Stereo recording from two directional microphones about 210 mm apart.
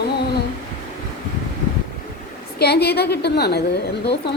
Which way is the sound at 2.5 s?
50° left (ahead or behind).